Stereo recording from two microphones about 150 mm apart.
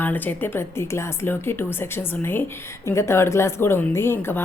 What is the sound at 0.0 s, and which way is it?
Speech, 10° left (ahead or behind).